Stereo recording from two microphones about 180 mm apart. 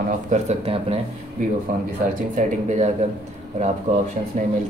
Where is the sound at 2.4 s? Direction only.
40° right (ahead or behind).